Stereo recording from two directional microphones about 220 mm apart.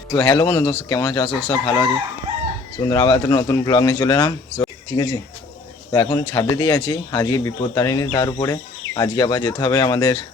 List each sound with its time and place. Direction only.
0.1 s speech: 15° left (ahead or behind)